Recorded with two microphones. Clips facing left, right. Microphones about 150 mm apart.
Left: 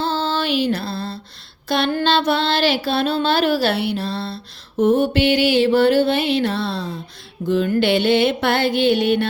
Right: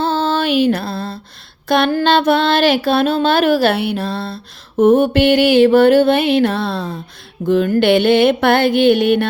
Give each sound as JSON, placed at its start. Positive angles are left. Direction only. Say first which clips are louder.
{"t": 0.0, "sound": "music", "louder": "right 5 dB", "side_deg": -55}
{"t": 1.6, "sound": "a sound", "louder": "right 5 dB", "side_deg": -50}
{"t": 7.4, "sound": "mantra", "louder": "right 4 dB", "side_deg": -55}